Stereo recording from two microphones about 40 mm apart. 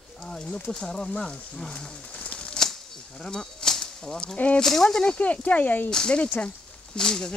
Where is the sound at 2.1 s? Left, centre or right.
Left.